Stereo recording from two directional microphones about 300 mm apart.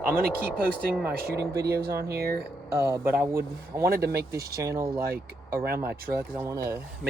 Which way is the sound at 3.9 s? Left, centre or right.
Right.